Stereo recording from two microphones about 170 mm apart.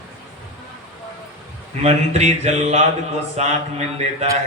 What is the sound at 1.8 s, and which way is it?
A man's voice, 40° right (ahead or behind).